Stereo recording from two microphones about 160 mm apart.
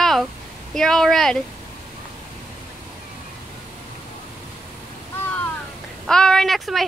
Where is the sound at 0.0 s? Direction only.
Centre (ahead or behind).